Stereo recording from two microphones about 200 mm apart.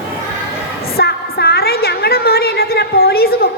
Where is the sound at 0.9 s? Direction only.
50° left (ahead or behind).